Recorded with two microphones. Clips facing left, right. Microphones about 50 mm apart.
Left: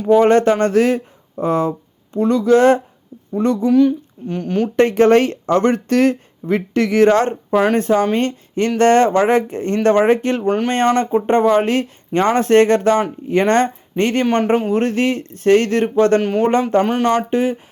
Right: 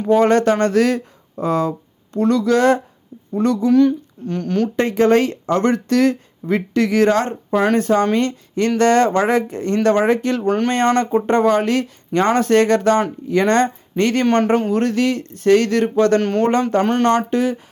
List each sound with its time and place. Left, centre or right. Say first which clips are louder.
0.2 s speech: left 2 dB; left
3.7 s speech: even; centre
4.8 s speech: left 4 dB; left
7.5 s speech: left 1 dB; centre
7.8 s speech: even; left
10.4 s speech: left 1 dB; centre
14.3 s speech: even; centre
14.7 s speech: left 1 dB; left
16.2 s speech: left 1 dB; centre
17.2 s speech: left 1 dB; left